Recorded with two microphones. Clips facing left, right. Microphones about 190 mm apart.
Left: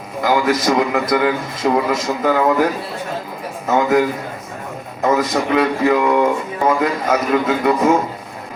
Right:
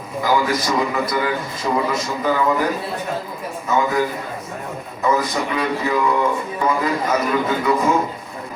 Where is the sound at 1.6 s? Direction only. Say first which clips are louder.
Left 5 dB; 50° left (ahead or behind).